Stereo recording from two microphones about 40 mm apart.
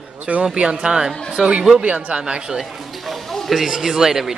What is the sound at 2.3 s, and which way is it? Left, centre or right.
Speech, centre.